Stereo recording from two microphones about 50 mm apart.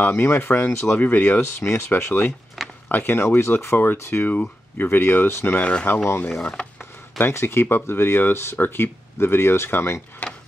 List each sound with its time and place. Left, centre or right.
0.0 s speech: left
1.4 s speech: left
1.9 s speech: left
2.6 s a sound: centre
2.9 s speech: left
4.3 s speech: left
5.6 s speech: left
6.8 s a sound: left
7.8 s speech: left